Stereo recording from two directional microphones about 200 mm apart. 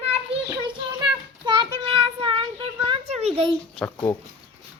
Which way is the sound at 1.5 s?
25° right (ahead or behind).